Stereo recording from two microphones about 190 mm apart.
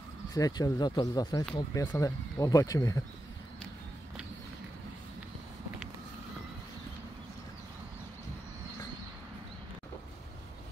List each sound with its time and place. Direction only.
0.3 s speech: 20° left (ahead or behind)